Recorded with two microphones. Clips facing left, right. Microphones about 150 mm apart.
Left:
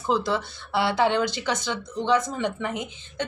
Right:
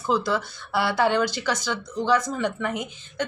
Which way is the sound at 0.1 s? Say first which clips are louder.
Even; 25° left (ahead or behind).